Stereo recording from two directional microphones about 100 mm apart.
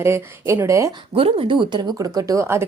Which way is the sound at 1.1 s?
65° right (ahead or behind).